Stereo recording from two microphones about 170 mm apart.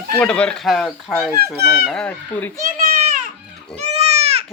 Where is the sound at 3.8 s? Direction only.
40° right (ahead or behind).